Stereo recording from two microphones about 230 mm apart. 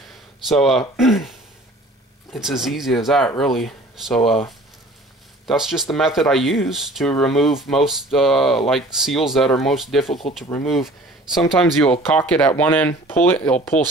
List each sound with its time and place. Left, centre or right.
0.5 s speech: centre
2.3 s speech: centre
5.5 s speech: centre